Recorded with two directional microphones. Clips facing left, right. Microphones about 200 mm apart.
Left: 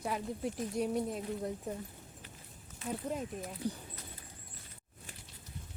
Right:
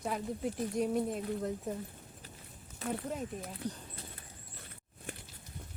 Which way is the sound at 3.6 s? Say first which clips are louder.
Left 3 dB; 10° left (ahead or behind).